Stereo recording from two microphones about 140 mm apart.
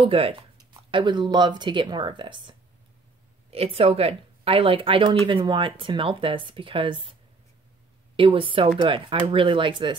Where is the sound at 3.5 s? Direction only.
45° right (ahead or behind).